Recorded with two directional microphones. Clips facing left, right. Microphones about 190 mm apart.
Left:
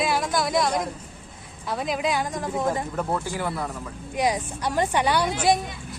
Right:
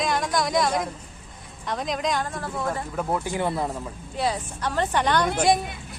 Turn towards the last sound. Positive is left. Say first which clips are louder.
# even
turn(degrees=10)  # may be behind; listen again after turning